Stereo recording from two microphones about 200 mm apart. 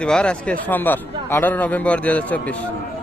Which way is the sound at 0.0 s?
5° left (ahead or behind).